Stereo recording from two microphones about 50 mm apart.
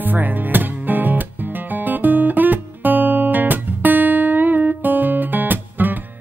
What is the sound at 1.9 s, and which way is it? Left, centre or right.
Guitar, right.